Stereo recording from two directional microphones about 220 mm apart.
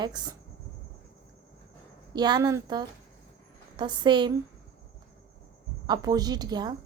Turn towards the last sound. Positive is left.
turn(degrees=-20)  # may be behind; listen again after turning